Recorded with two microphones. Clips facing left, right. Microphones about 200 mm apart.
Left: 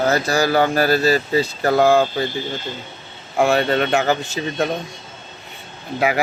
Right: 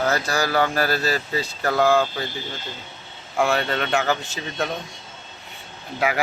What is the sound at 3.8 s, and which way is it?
Speech, 10° left (ahead or behind).